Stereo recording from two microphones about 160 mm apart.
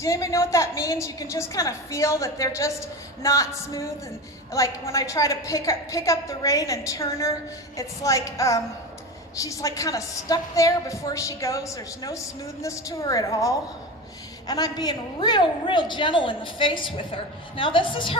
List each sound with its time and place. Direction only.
0.0 s a woman's voice: 20° left (ahead or behind)